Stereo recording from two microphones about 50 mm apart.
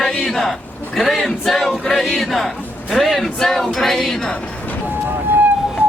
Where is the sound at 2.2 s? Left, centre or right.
Centre.